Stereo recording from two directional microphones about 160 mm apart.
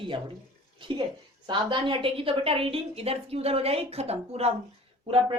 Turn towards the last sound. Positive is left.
turn(degrees=-35)  # may be behind; listen again after turning